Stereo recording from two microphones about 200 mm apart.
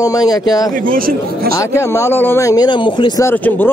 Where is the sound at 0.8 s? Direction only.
45° right (ahead or behind).